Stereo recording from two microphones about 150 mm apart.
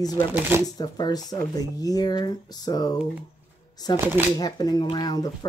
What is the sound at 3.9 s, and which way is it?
Speech, 15° right (ahead or behind).